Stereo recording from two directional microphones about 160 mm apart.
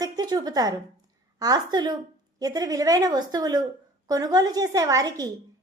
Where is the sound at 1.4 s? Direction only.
25° right (ahead or behind).